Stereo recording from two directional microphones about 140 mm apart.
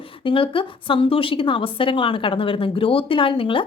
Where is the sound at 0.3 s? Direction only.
40° left (ahead or behind).